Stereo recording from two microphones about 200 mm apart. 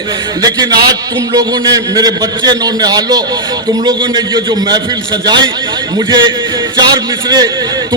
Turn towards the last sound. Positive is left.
turn(degrees=-20)  # may be behind; listen again after turning